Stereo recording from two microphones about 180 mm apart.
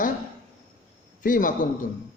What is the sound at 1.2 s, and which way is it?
Speech, 50° left (ahead or behind).